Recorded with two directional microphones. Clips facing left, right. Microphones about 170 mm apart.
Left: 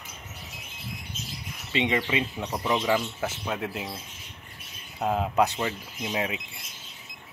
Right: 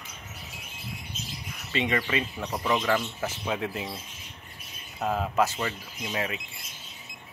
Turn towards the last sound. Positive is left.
turn(degrees=10)  # may be behind; listen again after turning